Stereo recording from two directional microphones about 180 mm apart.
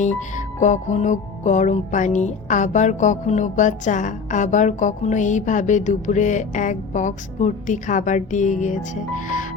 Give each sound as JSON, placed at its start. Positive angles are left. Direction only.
{"t": 0.0, "sound": "music", "side_deg": 45}